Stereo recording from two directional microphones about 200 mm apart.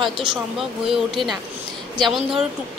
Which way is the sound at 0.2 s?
Centre (ahead or behind).